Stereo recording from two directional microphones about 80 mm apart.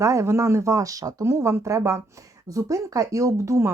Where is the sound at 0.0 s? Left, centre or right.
Right.